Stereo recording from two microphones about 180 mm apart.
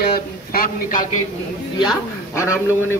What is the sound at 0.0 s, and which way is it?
Speech, 55° left (ahead or behind).